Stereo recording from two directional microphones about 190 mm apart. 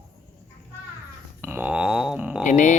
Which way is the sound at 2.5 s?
40° left (ahead or behind).